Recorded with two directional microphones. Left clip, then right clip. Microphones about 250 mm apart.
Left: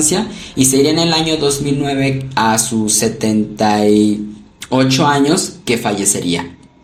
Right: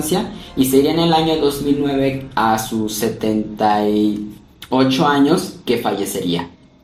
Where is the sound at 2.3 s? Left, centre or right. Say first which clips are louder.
Left 3 dB; left.